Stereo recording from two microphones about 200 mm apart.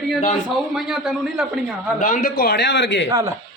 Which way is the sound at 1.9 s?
40° left (ahead or behind).